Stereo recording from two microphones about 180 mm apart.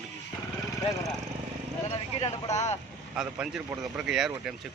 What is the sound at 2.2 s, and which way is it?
Speech, 40° left (ahead or behind).